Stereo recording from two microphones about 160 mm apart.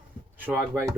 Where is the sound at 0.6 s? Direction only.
15° right (ahead or behind).